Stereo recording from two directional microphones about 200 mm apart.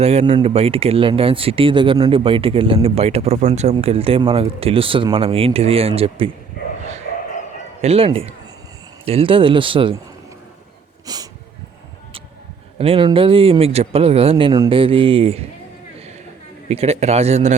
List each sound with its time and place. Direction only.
0.0 s speech: 30° right (ahead or behind)
7.8 s speech: 30° right (ahead or behind)
11.0 s a sound: 20° right (ahead or behind)
12.8 s speech: 25° right (ahead or behind)
16.6 s speech: 30° right (ahead or behind)